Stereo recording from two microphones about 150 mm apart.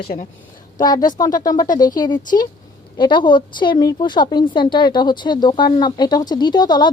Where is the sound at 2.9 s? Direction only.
30° left (ahead or behind).